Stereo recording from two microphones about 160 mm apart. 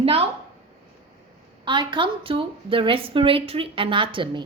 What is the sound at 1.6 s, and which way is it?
A woman's voice, 30° right (ahead or behind).